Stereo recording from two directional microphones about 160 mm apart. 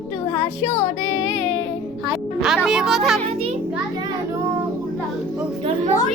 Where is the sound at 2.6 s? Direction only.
Centre (ahead or behind).